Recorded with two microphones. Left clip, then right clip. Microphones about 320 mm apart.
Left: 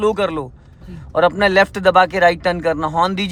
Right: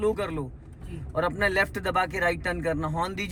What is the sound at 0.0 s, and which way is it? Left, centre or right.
Speech, centre.